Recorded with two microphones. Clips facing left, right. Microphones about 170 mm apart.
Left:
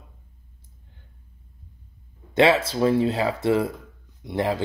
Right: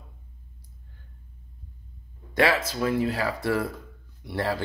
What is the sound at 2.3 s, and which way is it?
Speech, 25° left (ahead or behind).